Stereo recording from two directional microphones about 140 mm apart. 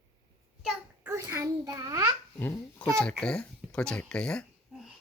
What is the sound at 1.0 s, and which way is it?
A child's voice, 20° right (ahead or behind).